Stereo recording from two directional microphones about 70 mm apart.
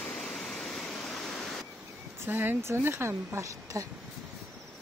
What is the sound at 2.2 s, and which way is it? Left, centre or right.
A woman's voice, right.